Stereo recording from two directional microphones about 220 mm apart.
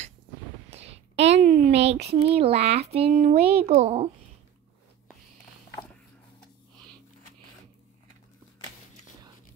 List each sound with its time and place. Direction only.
0.7 s a sound: 30° right (ahead or behind)
1.3 s a woman's voice: 30° right (ahead or behind)
1.8 s speech: 50° right (ahead or behind)
2.0 s speech: 25° right (ahead or behind)